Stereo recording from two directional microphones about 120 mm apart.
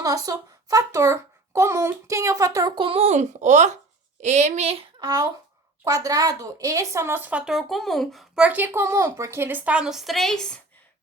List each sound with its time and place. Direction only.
0.0 s a child's voice: 30° right (ahead or behind)
2.8 s a child's voice: 55° right (ahead or behind)
4.9 s speech: 30° right (ahead or behind); by 10.6 s 5° left (ahead or behind)